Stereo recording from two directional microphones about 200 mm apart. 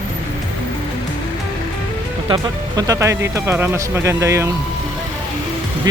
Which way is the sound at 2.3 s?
20° right (ahead or behind).